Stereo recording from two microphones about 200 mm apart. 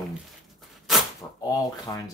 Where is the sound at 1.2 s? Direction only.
15° left (ahead or behind).